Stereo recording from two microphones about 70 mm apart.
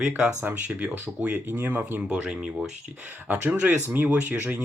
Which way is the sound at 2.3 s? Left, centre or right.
Centre.